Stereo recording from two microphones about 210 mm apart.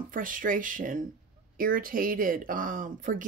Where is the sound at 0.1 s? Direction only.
40° right (ahead or behind).